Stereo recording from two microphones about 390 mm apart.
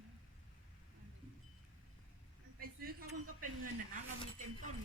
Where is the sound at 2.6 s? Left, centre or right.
Right.